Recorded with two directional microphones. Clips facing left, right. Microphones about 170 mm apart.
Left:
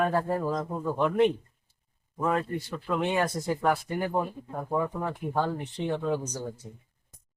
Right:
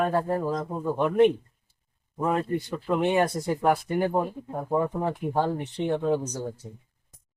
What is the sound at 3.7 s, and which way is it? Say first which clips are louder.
Speech: right 6 dB; 15° right (ahead or behind).